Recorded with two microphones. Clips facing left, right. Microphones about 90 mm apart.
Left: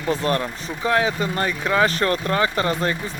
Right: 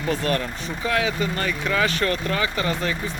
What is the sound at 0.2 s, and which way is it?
Speech, 30° left (ahead or behind).